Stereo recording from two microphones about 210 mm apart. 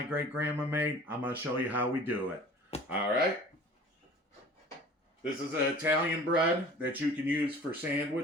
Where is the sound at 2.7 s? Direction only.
30° left (ahead or behind).